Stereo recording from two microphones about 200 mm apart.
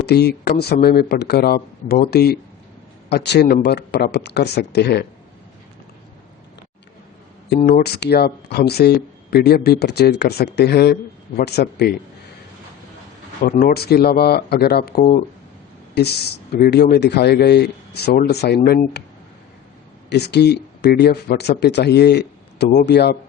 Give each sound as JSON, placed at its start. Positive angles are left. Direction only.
{"t": 0.0, "sound": "speech", "side_deg": 55}
{"t": 7.7, "sound": "speech", "side_deg": 55}
{"t": 13.4, "sound": "speech", "side_deg": 45}
{"t": 20.1, "sound": "speech", "side_deg": 55}